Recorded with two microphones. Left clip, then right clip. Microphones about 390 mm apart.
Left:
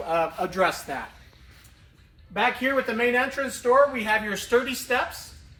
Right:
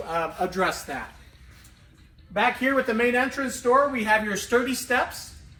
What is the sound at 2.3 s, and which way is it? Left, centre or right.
Speech, centre.